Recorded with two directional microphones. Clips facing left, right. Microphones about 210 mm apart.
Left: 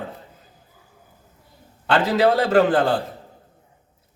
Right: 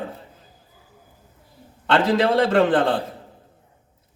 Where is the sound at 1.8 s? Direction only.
Centre (ahead or behind).